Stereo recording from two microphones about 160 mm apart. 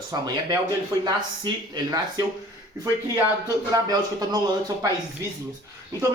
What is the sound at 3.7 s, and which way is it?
Speech, 25° right (ahead or behind).